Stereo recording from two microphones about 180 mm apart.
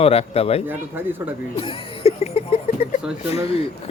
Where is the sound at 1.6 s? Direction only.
30° left (ahead or behind).